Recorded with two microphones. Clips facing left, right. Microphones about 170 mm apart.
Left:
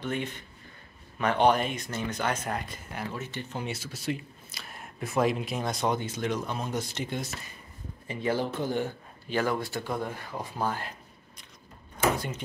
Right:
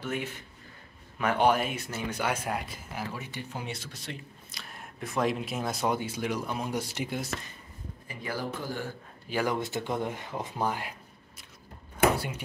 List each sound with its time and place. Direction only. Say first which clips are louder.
0.0 s speech: left 2 dB; 5° right (ahead or behind)
3.6 s speech: left 6 dB; 5° left (ahead or behind)
8.1 s speech: left 6 dB; 25° left (ahead or behind)
9.3 s speech: left 1 dB; 15° right (ahead or behind)